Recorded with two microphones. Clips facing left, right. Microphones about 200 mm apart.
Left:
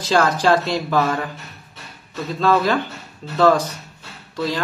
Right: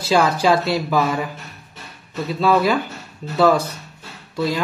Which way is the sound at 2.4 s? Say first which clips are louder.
Right 1 dB; 10° right (ahead or behind).